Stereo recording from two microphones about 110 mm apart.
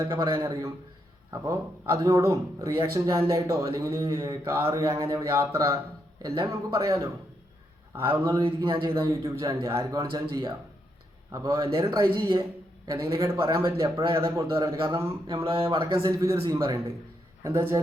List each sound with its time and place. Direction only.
0.2 s a man's voice: 25° right (ahead or behind)
8.4 s a man's voice: 50° right (ahead or behind)
9.2 s a man's voice: 30° right (ahead or behind)
16.0 s a man's voice: 30° right (ahead or behind)